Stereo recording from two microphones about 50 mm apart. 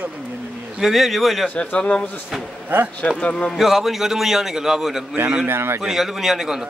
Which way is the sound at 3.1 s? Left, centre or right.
Left.